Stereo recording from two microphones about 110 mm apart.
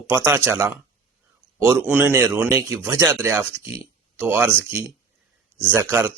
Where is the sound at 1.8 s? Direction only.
15° right (ahead or behind).